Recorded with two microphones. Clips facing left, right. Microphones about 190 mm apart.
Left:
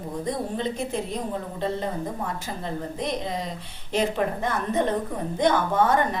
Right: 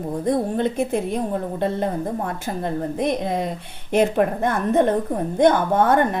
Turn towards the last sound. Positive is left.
turn(degrees=-55)  # may be behind; listen again after turning